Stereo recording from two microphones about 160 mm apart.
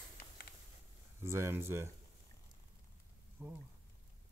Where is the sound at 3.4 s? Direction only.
10° right (ahead or behind).